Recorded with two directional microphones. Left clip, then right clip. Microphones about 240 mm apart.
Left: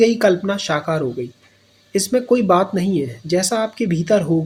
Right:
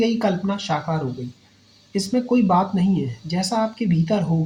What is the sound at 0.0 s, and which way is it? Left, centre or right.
Speech, left.